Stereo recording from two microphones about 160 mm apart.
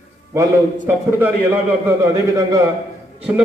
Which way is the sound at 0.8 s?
15° right (ahead or behind).